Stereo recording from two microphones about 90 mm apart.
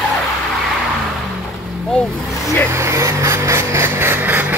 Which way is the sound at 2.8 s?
35° right (ahead or behind).